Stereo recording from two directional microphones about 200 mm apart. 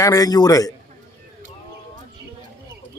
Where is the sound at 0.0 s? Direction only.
20° left (ahead or behind).